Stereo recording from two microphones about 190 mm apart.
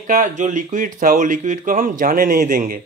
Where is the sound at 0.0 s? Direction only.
45° right (ahead or behind).